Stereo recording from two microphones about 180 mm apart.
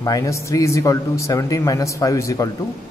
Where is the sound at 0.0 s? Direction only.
20° left (ahead or behind).